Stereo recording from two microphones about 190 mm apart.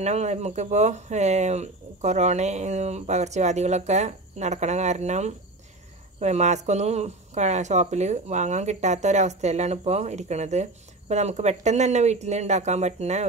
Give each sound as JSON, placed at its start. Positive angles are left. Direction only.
{"t": 0.0, "sound": "speech", "side_deg": -35}